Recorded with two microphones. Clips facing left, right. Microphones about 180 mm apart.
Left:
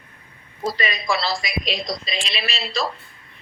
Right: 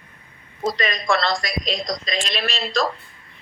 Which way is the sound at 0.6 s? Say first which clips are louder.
Right 2 dB; 5° left (ahead or behind).